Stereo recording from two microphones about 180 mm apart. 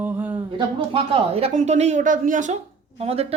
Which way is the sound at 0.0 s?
10° right (ahead or behind).